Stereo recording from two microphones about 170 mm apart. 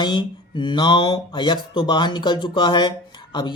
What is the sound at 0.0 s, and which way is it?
Speech, 25° left (ahead or behind).